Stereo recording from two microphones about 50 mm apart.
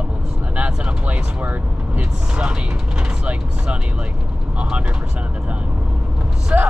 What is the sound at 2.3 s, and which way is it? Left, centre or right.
Speech, centre.